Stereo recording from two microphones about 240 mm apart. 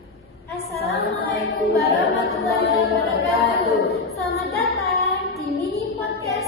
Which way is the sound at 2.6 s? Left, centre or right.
Left.